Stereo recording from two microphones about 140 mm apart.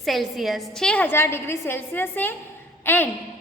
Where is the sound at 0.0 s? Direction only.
Centre (ahead or behind).